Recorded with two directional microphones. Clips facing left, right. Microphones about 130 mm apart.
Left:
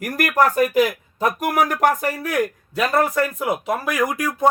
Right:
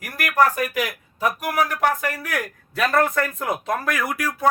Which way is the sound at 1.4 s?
45° left (ahead or behind).